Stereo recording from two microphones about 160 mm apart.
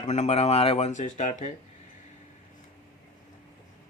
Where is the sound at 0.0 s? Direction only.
45° left (ahead or behind).